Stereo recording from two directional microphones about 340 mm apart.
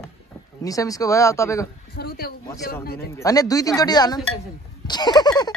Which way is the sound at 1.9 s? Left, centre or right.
Left.